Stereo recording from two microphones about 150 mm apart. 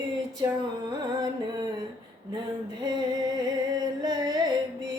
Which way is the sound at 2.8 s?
25° right (ahead or behind).